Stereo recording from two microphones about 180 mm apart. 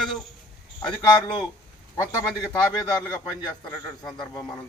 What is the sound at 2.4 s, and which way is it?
A man's voice, 20° left (ahead or behind).